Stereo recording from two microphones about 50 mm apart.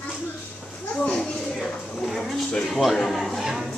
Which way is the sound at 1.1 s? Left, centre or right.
Centre.